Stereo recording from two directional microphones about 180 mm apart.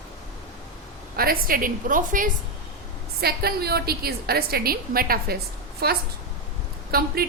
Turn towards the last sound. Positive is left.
turn(degrees=-60)  # may be behind; listen again after turning